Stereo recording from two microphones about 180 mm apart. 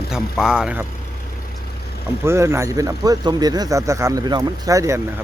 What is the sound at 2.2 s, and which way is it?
Speech, 15° right (ahead or behind).